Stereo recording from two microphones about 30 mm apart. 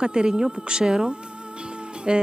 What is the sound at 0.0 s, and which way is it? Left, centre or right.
Speech, right.